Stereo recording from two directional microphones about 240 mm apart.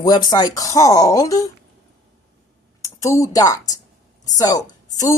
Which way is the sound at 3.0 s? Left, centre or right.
Centre.